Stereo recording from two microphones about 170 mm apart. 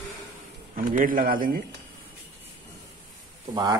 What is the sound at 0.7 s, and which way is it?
Speech, 55° right (ahead or behind).